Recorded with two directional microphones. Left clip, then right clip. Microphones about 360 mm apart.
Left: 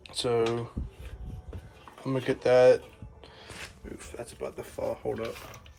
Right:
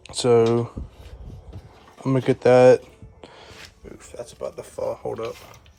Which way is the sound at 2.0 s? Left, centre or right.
Right.